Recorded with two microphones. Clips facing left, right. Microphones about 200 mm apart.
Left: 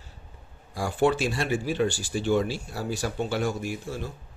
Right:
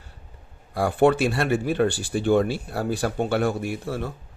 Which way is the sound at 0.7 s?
60° right (ahead or behind).